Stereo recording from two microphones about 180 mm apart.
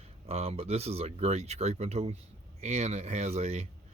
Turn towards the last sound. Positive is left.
turn(degrees=-35)  # may be behind; listen again after turning